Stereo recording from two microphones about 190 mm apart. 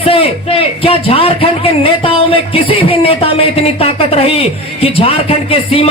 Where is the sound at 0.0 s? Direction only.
30° left (ahead or behind).